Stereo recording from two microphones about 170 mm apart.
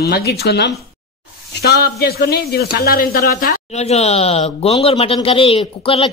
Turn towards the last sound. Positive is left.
turn(degrees=35)  # may be behind; listen again after turning